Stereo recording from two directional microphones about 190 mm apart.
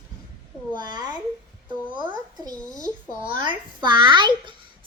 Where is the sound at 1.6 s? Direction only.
25° right (ahead or behind).